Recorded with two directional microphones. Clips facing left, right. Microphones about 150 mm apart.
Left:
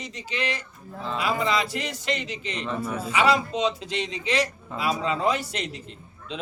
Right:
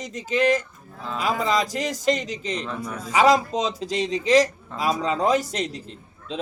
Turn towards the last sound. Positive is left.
turn(degrees=-40)  # may be behind; listen again after turning